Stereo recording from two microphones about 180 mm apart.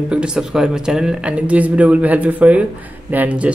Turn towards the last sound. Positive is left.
turn(degrees=-10)  # may be behind; listen again after turning